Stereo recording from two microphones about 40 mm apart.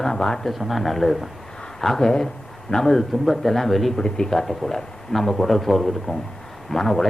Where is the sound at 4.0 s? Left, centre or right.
Centre.